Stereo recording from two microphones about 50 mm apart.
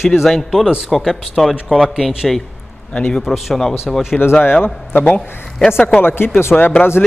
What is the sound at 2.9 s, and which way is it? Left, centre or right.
Speech, left.